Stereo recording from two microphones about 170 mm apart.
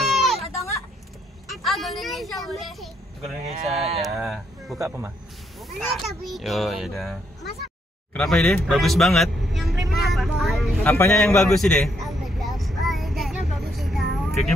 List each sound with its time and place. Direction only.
0.0 s a sound: centre (ahead or behind)
1.5 s vehicle: centre (ahead or behind)
3.6 s speech: 35° right (ahead or behind)
4.7 s a man's voice: 15° right (ahead or behind)
5.6 s a child's voice: centre (ahead or behind)
9.8 s vehicle: centre (ahead or behind)
10.9 s a man's voice: 15° left (ahead or behind)
11.1 s vehicle: 5° left (ahead or behind)